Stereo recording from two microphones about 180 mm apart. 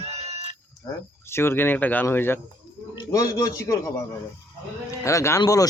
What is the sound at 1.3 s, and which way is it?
Speech, 15° left (ahead or behind).